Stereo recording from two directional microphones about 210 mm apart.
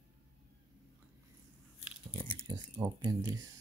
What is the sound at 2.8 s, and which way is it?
Speech, 15° right (ahead or behind).